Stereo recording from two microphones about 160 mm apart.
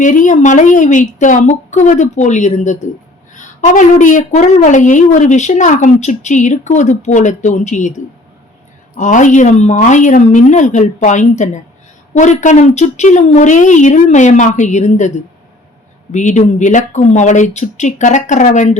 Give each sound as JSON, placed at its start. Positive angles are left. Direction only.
{"t": 0.0, "sound": "a woman's voice", "side_deg": 50}
{"t": 16.1, "sound": "a woman's voice", "side_deg": 50}